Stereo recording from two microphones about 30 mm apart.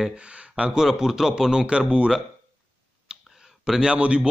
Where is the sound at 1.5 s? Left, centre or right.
Right.